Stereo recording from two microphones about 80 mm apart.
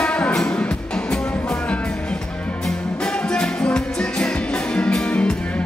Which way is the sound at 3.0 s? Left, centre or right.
Centre.